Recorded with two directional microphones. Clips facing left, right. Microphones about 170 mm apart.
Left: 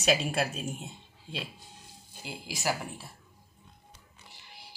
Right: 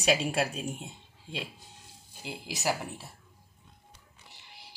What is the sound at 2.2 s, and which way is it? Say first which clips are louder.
Speech: right 1 dB; 20° right (ahead or behind).